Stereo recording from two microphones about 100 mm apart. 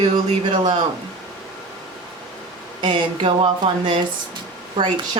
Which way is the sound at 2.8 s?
60° right (ahead or behind).